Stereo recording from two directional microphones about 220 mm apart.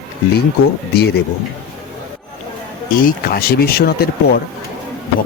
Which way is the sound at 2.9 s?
40° left (ahead or behind).